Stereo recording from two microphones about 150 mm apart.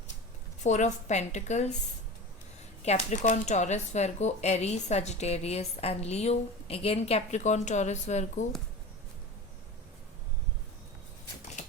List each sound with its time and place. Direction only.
0.6 s speech: 55° left (ahead or behind)
2.8 s speech: 50° left (ahead or behind)